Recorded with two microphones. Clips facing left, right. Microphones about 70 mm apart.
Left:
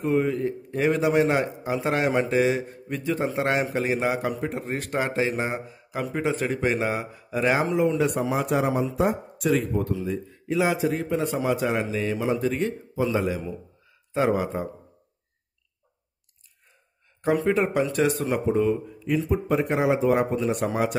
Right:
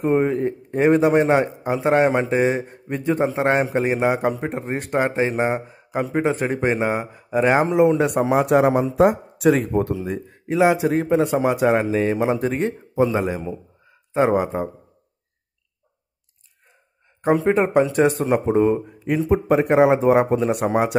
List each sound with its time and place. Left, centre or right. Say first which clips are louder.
0.0 s speech: right 4 dB; right
0.4 s a man's voice: right 5 dB; right
3.3 s a man's voice: right 5 dB; right
7.7 s speech: right 6 dB; right
8.9 s speech: right 8 dB; right
9.5 s speech: right 6 dB; right
10.0 s speech: right 1 dB; right
13.8 s a sound: right 4 dB; right
17.5 s speech: right 5 dB; right